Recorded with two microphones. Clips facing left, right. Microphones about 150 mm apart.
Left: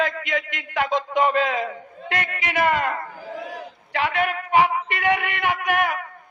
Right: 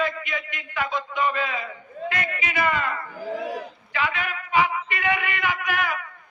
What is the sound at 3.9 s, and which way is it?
A man's voice, 60° left (ahead or behind).